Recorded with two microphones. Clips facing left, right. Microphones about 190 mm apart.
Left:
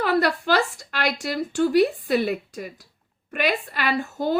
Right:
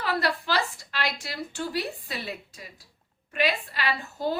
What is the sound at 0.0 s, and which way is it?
A woman's voice, 55° left (ahead or behind).